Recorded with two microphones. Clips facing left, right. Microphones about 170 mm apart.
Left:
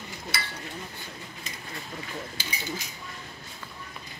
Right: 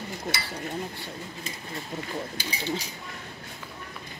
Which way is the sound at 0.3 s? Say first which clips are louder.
Right 2 dB; 55° right (ahead or behind).